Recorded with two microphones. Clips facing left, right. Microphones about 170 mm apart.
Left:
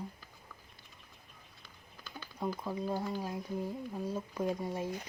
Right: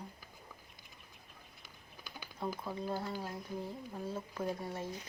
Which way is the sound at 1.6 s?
15° right (ahead or behind).